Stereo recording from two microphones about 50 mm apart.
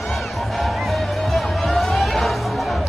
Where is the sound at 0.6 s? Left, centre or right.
Centre.